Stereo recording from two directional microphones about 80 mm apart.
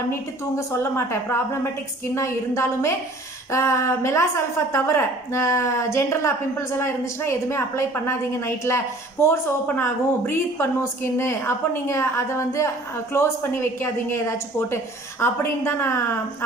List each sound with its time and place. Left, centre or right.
0.1 s speech: left